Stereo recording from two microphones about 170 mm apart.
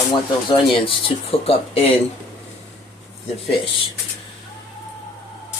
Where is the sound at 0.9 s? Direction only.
35° left (ahead or behind).